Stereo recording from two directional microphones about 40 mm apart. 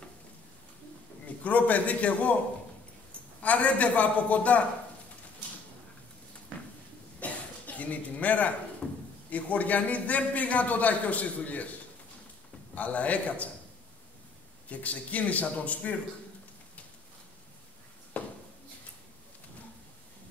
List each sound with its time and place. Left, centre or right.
1.2 s a man's voice: left
3.4 s a man's voice: left
7.2 s a sound: left
8.8 s drawer open or close: left
9.3 s a man's voice: left
12.7 s a man's voice: left
14.7 s a man's voice: left
18.1 s a sound: left